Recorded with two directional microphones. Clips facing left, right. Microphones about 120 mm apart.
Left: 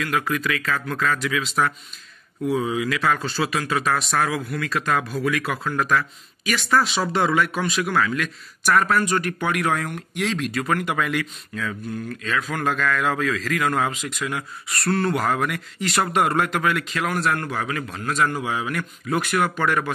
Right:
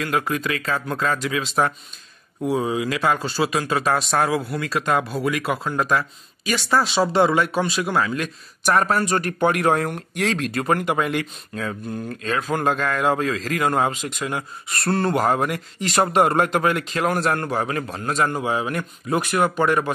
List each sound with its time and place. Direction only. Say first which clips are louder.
0.0 s speech: right 1 dB; 30° right (ahead or behind); by 10.6 s 50° right (ahead or behind)
10.6 s speech: right 3 dB; 30° right (ahead or behind)
14.9 s speech: right 2 dB; 30° right (ahead or behind)